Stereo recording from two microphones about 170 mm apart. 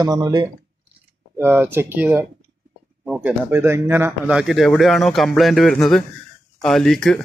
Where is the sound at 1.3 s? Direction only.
10° right (ahead or behind).